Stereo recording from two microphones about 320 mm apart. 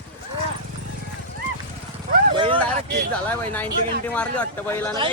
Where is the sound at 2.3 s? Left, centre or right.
Centre.